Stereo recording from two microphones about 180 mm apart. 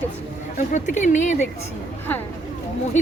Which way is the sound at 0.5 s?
40° left (ahead or behind).